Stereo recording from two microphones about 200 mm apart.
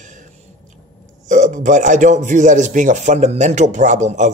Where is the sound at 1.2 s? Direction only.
40° right (ahead or behind).